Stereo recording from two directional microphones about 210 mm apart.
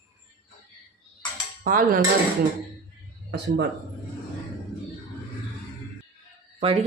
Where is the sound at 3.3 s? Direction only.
55° right (ahead or behind).